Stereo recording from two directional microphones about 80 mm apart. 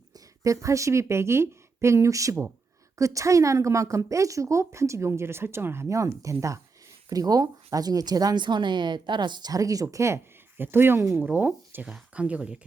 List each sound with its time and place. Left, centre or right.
0.1 s a woman's voice: right
10.6 s speech: right